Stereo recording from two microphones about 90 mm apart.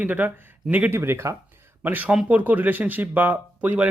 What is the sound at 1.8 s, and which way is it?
Speech, 20° right (ahead or behind).